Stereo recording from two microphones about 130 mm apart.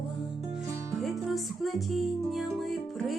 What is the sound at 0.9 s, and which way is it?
Music, centre (ahead or behind).